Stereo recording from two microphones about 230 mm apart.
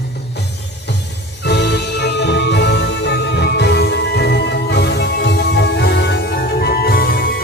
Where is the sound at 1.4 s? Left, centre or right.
Left.